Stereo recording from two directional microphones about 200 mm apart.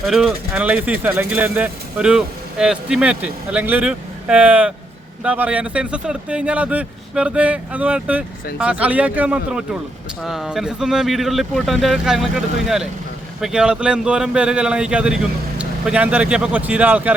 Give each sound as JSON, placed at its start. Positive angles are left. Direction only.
{"t": 0.0, "sound": "speech", "side_deg": -5}